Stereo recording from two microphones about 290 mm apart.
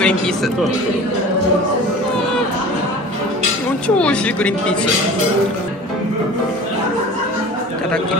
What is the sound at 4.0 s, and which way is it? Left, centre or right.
Speech, centre.